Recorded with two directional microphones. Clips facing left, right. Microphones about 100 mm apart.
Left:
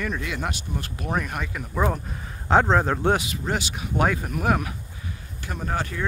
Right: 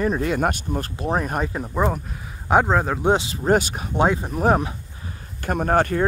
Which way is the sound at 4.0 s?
25° right (ahead or behind).